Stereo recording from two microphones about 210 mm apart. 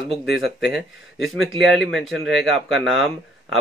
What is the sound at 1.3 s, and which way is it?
Speech, centre (ahead or behind).